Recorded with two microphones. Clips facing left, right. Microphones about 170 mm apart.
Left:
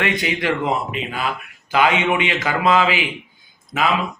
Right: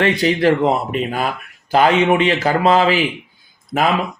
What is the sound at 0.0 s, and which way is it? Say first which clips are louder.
A man's voice: right 7 dB; 35° right (ahead or behind).